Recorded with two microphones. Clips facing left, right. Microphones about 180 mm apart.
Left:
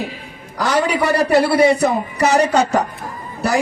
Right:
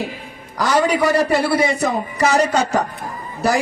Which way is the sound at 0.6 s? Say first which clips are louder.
Right 1 dB; 60° left (ahead or behind).